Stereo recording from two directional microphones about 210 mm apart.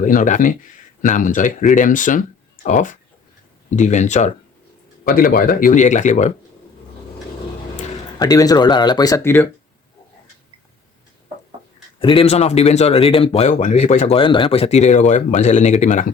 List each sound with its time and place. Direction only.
0.0 s speech: 40° left (ahead or behind)
8.2 s speech: 15° left (ahead or behind)
11.9 s speech: 25° left (ahead or behind)